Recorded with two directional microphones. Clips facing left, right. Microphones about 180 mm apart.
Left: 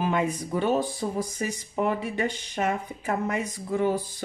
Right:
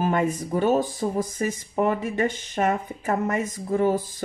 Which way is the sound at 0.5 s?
45° right (ahead or behind).